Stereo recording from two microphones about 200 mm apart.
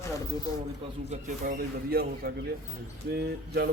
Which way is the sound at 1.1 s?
45° right (ahead or behind).